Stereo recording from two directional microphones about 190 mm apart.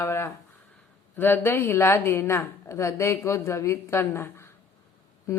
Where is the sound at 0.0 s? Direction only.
15° left (ahead or behind).